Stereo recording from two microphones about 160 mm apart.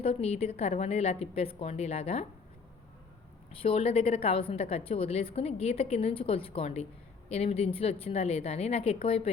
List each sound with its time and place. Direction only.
0.0 s a woman's voice: 40° left (ahead or behind)
3.5 s a woman's voice: 35° left (ahead or behind)